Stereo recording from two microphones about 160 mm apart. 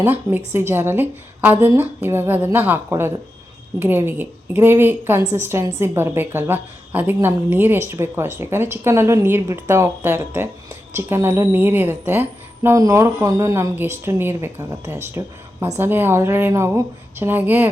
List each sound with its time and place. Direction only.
0.0 s a woman's voice: 10° right (ahead or behind)